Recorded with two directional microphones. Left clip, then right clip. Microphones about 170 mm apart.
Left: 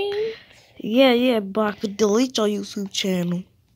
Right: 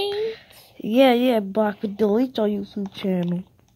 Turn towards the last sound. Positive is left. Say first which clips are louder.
# left 2 dB
turn(degrees=5)  # may be behind; listen again after turning